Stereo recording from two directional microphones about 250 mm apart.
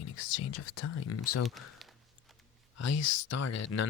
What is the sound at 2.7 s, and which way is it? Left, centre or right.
Speech, left.